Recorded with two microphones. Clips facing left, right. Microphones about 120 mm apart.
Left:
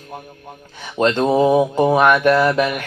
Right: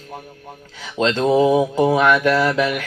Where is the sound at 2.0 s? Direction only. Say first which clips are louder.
Left 2 dB; 20° left (ahead or behind).